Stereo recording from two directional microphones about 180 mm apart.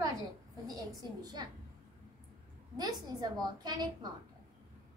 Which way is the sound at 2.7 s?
20° right (ahead or behind).